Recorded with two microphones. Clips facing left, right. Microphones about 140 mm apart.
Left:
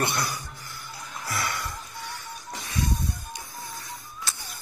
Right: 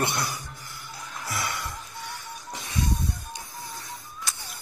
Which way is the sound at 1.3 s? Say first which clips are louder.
Left 1 dB; 15° right (ahead or behind).